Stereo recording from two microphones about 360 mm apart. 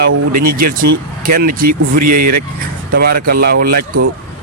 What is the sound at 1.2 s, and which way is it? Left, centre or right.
Speech, right.